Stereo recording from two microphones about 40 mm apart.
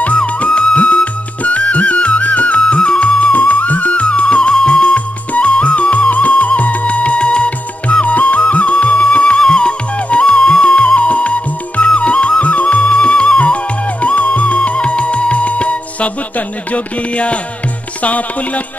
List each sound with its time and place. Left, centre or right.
0.5 s music: left
1.4 s music: left
2.6 s music: left